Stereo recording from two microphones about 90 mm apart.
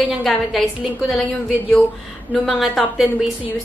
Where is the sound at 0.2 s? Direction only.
5° left (ahead or behind).